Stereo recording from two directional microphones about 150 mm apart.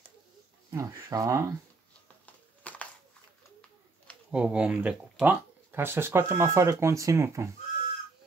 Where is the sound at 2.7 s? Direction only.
10° left (ahead or behind).